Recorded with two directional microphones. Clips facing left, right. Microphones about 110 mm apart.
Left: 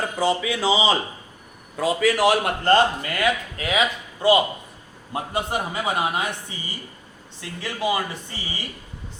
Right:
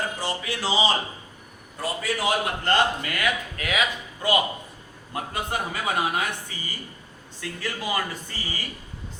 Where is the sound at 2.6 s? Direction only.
35° left (ahead or behind).